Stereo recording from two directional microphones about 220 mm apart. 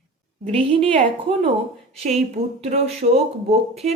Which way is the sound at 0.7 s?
30° right (ahead or behind).